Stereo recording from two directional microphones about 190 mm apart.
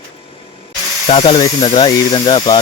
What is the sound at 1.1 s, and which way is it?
Speech, 30° left (ahead or behind).